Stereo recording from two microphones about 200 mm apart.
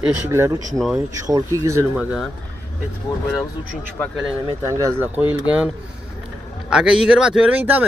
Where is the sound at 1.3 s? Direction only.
15° right (ahead or behind).